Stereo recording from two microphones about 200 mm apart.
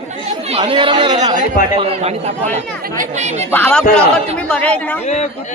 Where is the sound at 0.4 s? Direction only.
30° right (ahead or behind).